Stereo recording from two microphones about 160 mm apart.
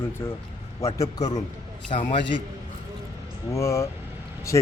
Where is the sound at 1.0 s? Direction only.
45° left (ahead or behind).